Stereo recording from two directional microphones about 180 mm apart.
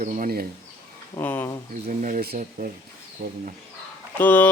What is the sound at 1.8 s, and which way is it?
Speech, 45° right (ahead or behind).